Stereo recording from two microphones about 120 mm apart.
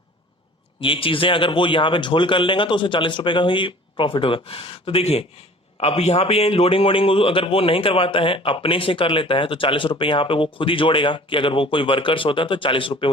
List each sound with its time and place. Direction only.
0.8 s a man's voice: 45° left (ahead or behind)